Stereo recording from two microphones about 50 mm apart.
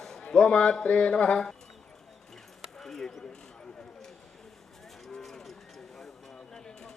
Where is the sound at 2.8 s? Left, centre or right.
Centre.